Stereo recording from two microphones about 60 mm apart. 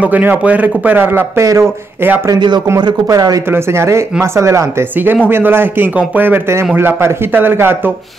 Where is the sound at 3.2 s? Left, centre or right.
Right.